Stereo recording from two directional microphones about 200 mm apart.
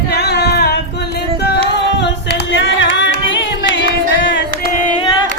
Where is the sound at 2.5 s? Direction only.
65° left (ahead or behind).